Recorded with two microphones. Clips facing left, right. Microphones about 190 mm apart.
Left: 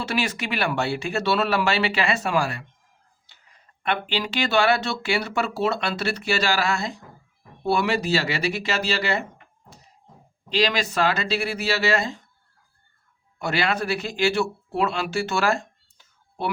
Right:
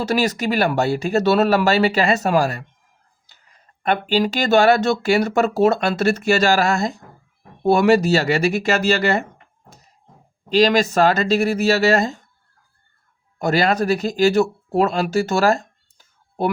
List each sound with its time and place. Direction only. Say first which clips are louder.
0.0 s speech: right 7 dB; 40° right (ahead or behind)
10.5 s speech: right 8 dB; 45° right (ahead or behind)
13.4 s speech: right 7 dB; 40° right (ahead or behind)